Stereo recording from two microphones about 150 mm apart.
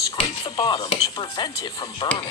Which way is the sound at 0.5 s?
25° left (ahead or behind).